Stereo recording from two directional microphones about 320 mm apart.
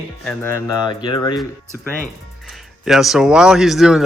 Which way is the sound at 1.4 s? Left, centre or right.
Centre.